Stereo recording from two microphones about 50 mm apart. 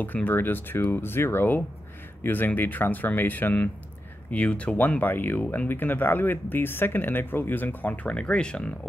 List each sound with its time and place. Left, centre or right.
0.0 s speech: left; by 8.7 s centre